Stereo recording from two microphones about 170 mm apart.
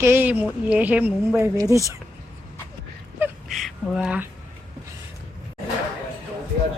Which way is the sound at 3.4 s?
Centre (ahead or behind).